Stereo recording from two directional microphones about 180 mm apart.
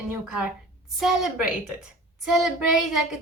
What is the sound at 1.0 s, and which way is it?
Speech, centre (ahead or behind).